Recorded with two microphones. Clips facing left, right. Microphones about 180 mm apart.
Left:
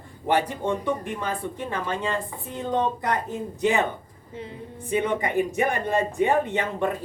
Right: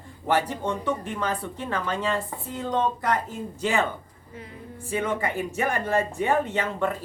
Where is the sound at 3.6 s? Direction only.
20° left (ahead or behind).